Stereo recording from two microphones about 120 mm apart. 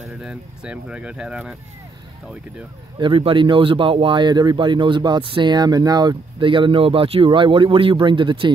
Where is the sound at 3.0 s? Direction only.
45° right (ahead or behind).